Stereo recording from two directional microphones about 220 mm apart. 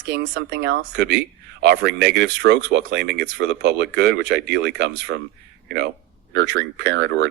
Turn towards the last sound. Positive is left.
turn(degrees=-50)  # may be behind; listen again after turning